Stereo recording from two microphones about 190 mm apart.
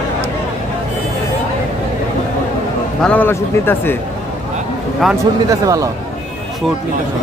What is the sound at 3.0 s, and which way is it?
Speech, 5° left (ahead or behind).